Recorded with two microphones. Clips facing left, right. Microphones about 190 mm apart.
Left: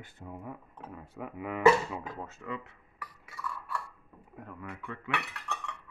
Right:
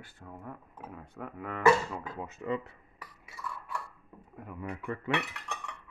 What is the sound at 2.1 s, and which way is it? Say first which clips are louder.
Speech: right 2 dB; 15° right (ahead or behind).